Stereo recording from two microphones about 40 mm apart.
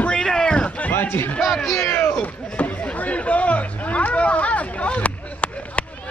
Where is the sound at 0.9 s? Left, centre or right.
Left.